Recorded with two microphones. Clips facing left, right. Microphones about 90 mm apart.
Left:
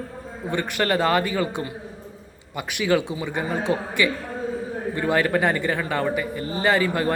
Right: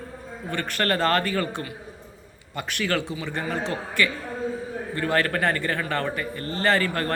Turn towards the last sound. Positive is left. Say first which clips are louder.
# left 2 dB
turn(degrees=10)  # may be behind; listen again after turning